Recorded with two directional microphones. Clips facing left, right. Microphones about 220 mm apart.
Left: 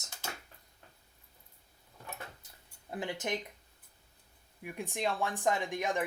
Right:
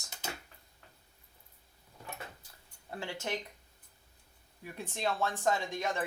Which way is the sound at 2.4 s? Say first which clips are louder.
Left 1 dB; 20° left (ahead or behind).